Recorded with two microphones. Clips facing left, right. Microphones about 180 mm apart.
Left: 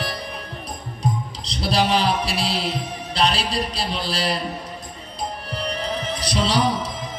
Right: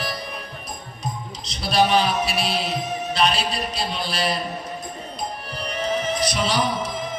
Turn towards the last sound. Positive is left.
turn(degrees=35)  # may be behind; listen again after turning